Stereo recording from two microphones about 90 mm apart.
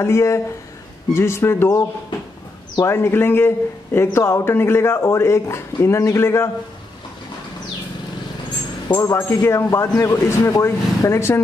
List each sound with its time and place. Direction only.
0.0 s a man's voice: 30° left (ahead or behind)
9.0 s speech: 30° left (ahead or behind)